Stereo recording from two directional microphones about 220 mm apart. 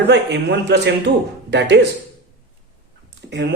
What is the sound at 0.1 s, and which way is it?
A man's voice, 50° right (ahead or behind).